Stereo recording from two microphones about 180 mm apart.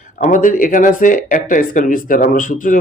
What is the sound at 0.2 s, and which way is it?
Speech, 45° left (ahead or behind).